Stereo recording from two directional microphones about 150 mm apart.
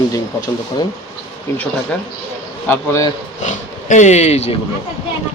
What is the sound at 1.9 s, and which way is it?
Speech, 5° left (ahead or behind).